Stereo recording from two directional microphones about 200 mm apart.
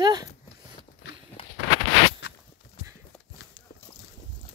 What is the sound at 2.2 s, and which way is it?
Walk, 60° left (ahead or behind).